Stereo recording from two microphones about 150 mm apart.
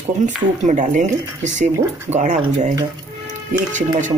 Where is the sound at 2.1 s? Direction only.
50° right (ahead or behind).